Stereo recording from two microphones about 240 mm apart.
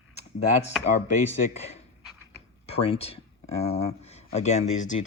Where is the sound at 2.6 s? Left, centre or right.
Left.